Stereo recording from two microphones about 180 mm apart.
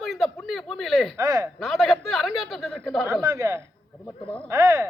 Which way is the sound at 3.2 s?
15° right (ahead or behind).